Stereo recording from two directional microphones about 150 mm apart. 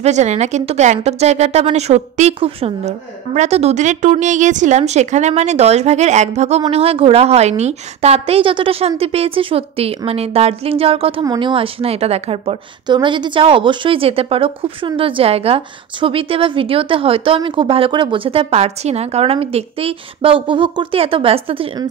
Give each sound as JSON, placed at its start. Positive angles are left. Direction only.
{"t": 0.0, "sound": "a woman's voice", "side_deg": -50}